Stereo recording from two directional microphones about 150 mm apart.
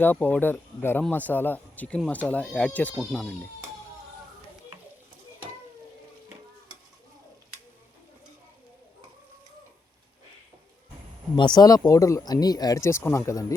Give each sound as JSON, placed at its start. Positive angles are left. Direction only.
{"t": 0.0, "sound": "speech", "side_deg": 10}
{"t": 11.3, "sound": "speech", "side_deg": 30}